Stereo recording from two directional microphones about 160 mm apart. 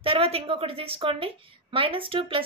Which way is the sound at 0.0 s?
35° right (ahead or behind).